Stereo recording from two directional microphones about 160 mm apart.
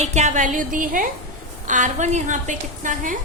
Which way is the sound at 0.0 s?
45° right (ahead or behind).